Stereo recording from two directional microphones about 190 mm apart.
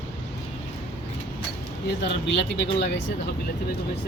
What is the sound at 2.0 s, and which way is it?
Speech, 65° left (ahead or behind).